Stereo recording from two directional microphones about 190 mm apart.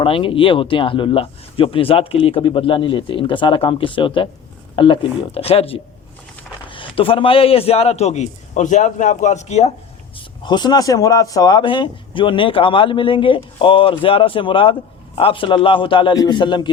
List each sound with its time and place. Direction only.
0.0 s a man's voice: 30° left (ahead or behind)
10.2 s speech: 25° left (ahead or behind)